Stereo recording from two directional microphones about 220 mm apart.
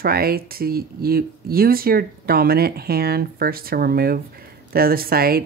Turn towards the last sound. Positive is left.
turn(degrees=-45)  # may be behind; listen again after turning